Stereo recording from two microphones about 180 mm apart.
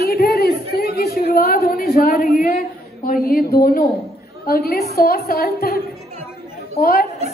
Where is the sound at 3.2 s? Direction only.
60° left (ahead or behind).